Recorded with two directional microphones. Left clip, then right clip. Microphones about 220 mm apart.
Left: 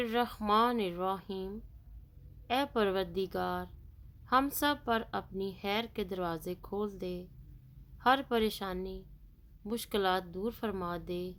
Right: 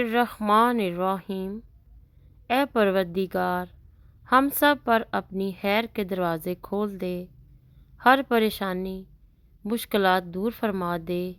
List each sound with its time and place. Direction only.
0.0 s a woman's voice: 30° right (ahead or behind)